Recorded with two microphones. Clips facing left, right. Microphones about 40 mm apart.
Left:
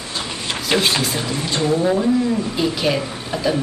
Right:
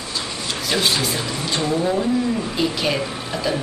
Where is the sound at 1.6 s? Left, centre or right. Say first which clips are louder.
Left 4 dB; centre.